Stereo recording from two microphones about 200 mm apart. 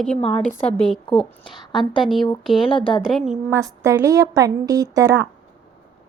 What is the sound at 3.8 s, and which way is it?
A woman's voice, 15° right (ahead or behind).